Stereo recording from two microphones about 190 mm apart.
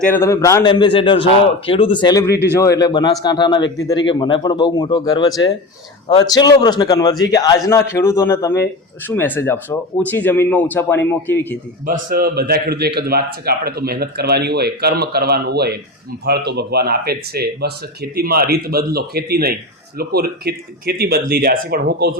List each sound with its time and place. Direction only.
0.0 s speech: 10° left (ahead or behind)
0.7 s a man's voice: 25° left (ahead or behind); by 11.5 s 10° left (ahead or behind)
11.9 s a man's voice: 50° right (ahead or behind)